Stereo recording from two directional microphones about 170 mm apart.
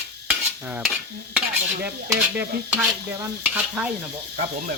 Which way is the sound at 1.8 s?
10° right (ahead or behind).